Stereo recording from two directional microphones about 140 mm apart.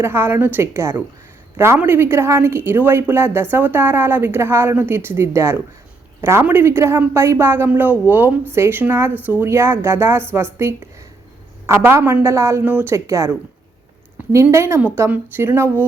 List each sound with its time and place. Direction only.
0.0 s a woman's voice: 15° right (ahead or behind)
14.2 s a sound: 10° right (ahead or behind)
14.5 s a woman's voice: 15° right (ahead or behind)